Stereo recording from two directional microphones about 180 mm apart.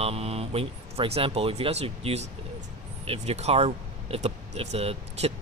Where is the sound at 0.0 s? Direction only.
35° right (ahead or behind).